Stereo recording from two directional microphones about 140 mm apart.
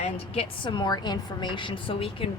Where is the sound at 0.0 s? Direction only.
40° left (ahead or behind).